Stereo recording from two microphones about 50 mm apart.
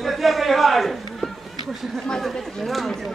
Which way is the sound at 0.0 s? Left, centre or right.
Centre.